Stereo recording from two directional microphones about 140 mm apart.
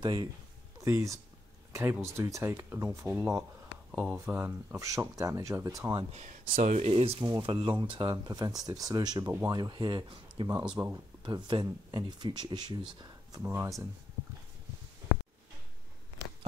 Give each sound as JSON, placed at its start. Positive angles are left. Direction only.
{"t": 0.0, "sound": "speech", "side_deg": -30}
{"t": 3.9, "sound": "speech", "side_deg": -5}
{"t": 6.1, "sound": "speech", "side_deg": -65}
{"t": 6.9, "sound": "speech", "side_deg": -40}
{"t": 10.8, "sound": "speech", "side_deg": -25}
{"t": 13.4, "sound": "speech", "side_deg": -15}